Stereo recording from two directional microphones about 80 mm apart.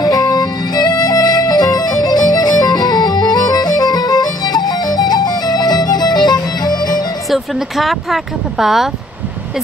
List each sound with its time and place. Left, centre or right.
0.0 s music: left
7.2 s speech: centre